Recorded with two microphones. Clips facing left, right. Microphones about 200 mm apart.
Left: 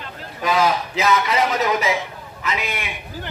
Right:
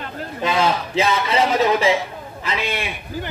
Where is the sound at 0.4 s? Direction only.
25° right (ahead or behind).